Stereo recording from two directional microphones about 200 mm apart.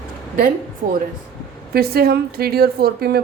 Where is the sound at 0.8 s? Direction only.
40° right (ahead or behind).